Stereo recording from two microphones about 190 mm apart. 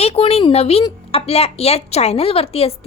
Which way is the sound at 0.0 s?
30° left (ahead or behind).